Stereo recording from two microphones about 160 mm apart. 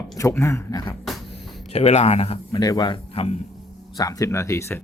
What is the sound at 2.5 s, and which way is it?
Speech, 25° left (ahead or behind).